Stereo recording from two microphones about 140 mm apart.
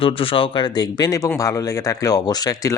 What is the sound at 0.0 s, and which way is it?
Speech, 40° left (ahead or behind).